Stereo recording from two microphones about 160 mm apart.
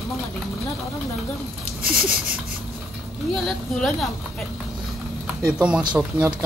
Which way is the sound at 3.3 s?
Centre (ahead or behind).